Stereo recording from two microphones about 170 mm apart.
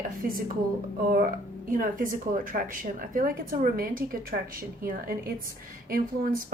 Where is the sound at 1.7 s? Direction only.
55° right (ahead or behind).